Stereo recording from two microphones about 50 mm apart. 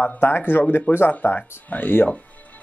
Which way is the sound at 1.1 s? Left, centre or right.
Left.